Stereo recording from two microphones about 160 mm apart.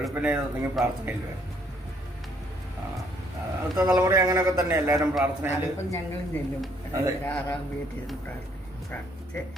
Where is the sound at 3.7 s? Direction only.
20° right (ahead or behind).